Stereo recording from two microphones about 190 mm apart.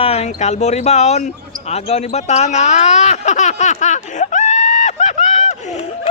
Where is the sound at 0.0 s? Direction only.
35° left (ahead or behind).